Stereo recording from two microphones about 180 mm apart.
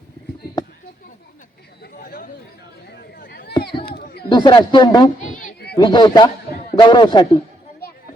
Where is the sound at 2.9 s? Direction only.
60° left (ahead or behind).